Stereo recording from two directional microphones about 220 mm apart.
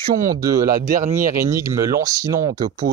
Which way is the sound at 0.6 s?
40° right (ahead or behind).